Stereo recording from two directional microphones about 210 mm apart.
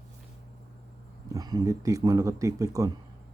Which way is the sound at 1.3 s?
20° right (ahead or behind).